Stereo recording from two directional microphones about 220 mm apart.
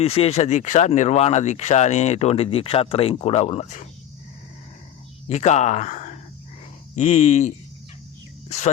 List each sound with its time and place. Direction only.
0.0 s speech: 25° left (ahead or behind)
5.3 s speech: 30° left (ahead or behind)